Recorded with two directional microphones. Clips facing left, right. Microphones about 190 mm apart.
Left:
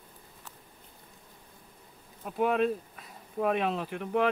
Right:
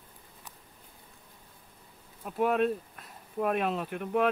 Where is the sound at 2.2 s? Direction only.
Centre (ahead or behind).